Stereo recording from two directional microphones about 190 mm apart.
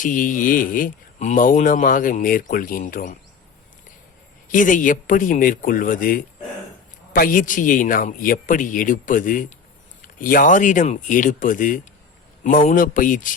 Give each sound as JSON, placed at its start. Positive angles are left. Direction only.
{"t": 0.0, "sound": "speech", "side_deg": 45}
{"t": 4.5, "sound": "speech", "side_deg": 45}